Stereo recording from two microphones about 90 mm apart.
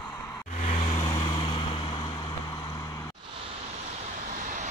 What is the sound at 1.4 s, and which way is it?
Vehicle, 65° left (ahead or behind).